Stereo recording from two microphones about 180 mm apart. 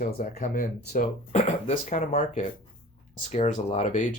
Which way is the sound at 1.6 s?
40° left (ahead or behind).